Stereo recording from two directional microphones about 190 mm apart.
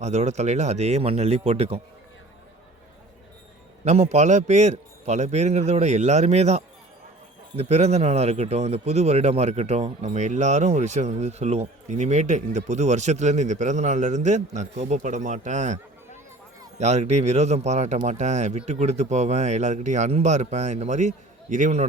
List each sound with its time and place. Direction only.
0.0 s speech: 35° right (ahead or behind)
3.8 s speech: 35° right (ahead or behind)